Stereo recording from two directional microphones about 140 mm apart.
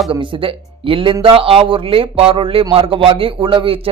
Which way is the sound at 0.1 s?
40° right (ahead or behind).